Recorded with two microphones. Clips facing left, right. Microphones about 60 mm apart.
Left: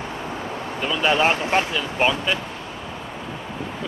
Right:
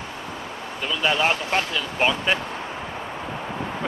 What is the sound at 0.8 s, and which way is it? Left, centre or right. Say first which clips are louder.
Speech: left 3 dB; centre.